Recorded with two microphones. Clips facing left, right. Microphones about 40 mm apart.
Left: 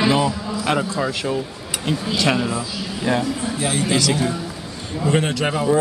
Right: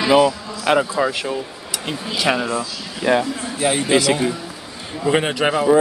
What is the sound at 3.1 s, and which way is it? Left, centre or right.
A man's voice, right.